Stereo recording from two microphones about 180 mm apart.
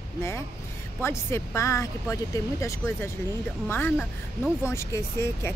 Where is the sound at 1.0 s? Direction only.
15° left (ahead or behind).